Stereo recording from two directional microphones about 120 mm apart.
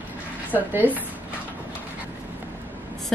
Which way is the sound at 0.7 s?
15° right (ahead or behind).